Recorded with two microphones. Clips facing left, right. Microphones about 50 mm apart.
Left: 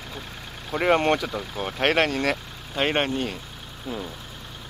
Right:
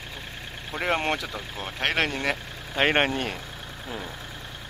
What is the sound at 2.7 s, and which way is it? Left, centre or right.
Speech, right.